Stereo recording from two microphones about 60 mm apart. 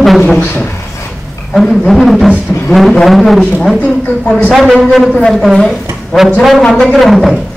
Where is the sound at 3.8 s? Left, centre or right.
Left.